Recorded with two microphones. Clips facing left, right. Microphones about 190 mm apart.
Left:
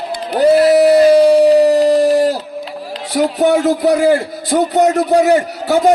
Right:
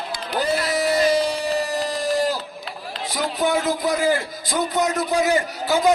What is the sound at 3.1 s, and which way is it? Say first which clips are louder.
A man's voice: left 9 dB; 65° left (ahead or behind).